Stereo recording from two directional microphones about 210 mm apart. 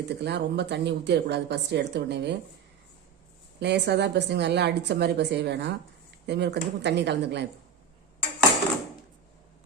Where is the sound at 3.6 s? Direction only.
55° right (ahead or behind).